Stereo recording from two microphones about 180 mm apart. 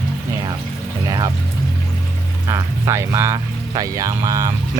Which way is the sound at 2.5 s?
20° right (ahead or behind).